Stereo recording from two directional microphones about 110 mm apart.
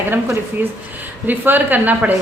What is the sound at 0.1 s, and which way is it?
A woman's voice, 20° right (ahead or behind).